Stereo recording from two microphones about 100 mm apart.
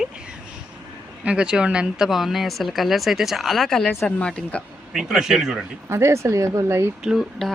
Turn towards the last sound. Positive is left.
turn(degrees=0)  # may be behind; listen again after turning